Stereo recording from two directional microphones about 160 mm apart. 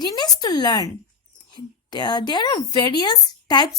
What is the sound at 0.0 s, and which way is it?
Speech, 25° left (ahead or behind).